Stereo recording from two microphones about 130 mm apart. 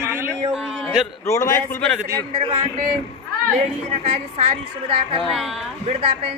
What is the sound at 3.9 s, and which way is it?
A woman's voice, 60° right (ahead or behind).